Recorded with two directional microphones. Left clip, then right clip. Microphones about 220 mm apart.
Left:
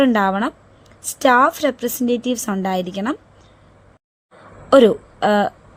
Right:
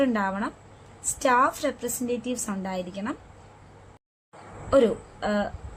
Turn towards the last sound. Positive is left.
turn(degrees=45)  # may be behind; listen again after turning